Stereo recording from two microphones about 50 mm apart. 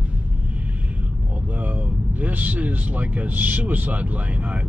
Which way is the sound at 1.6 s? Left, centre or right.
Right.